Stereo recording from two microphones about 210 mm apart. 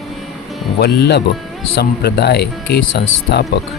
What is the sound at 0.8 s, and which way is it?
Speech, 50° left (ahead or behind).